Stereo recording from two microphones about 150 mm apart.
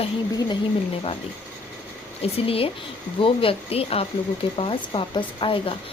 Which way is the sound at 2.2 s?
40° left (ahead or behind).